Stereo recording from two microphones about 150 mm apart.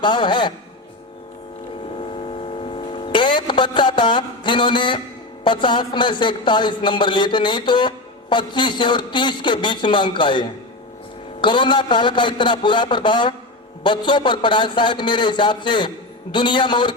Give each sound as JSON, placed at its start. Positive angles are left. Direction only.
{"t": 0.0, "sound": "a man's voice", "side_deg": 30}
{"t": 2.0, "sound": "mains hum", "side_deg": 40}
{"t": 5.4, "sound": "a man's voice", "side_deg": 30}